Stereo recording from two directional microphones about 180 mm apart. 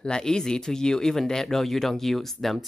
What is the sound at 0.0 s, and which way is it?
Speech, 5° left (ahead or behind).